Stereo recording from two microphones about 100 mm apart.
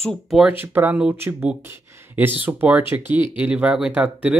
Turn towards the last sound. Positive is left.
turn(degrees=-15)  # may be behind; listen again after turning